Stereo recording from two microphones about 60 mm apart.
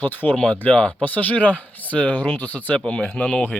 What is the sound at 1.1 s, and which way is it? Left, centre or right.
Speech, left.